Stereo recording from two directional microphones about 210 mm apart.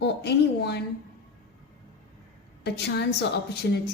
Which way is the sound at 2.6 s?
50° left (ahead or behind).